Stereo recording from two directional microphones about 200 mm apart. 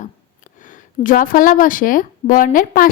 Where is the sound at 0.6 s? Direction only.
40° left (ahead or behind).